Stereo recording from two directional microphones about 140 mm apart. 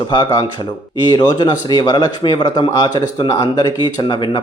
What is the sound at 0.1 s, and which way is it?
Speech, 30° left (ahead or behind).